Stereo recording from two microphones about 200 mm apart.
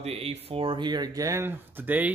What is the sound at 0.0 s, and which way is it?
A man's voice, 30° right (ahead or behind).